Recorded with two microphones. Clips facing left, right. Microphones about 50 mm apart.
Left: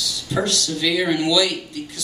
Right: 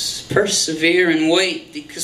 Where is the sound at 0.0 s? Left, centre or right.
Right.